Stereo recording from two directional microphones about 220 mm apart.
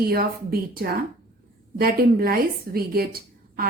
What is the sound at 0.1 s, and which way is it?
A woman's voice, 45° right (ahead or behind).